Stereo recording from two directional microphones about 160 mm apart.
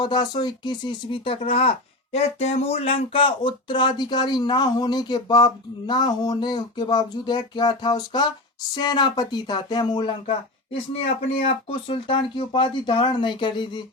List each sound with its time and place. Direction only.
0.0 s speech: 25° left (ahead or behind)
11.3 s speech: 35° left (ahead or behind)